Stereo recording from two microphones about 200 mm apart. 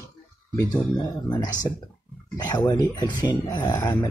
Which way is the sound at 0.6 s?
20° left (ahead or behind).